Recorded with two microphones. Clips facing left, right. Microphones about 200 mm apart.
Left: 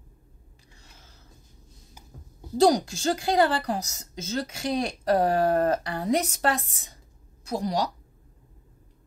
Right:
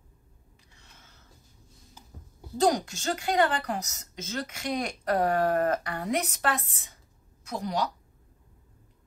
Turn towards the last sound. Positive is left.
turn(degrees=35)  # may be behind; listen again after turning